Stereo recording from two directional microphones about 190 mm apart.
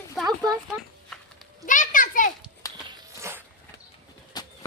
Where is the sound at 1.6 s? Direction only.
45° left (ahead or behind).